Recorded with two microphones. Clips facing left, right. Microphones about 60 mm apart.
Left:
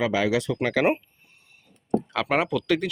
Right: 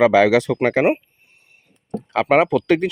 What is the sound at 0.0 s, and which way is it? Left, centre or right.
Speech, right.